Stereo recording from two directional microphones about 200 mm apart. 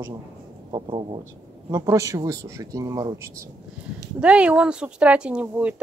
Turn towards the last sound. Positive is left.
turn(degrees=-5)  # may be behind; listen again after turning